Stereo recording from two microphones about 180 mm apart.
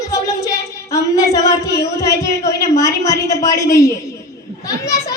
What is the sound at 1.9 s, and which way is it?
A child's voice, 15° left (ahead or behind).